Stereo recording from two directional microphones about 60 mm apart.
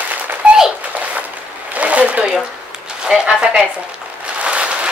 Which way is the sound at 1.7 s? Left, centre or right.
Right.